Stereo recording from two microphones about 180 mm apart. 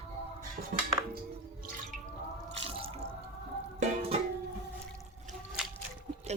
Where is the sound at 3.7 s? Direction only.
40° right (ahead or behind).